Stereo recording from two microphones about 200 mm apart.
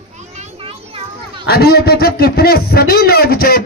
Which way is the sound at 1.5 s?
50° left (ahead or behind).